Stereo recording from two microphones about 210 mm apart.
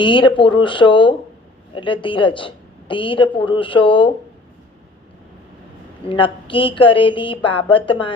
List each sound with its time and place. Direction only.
0.0 s a woman's voice: 25° left (ahead or behind)
6.1 s a woman's voice: 25° left (ahead or behind)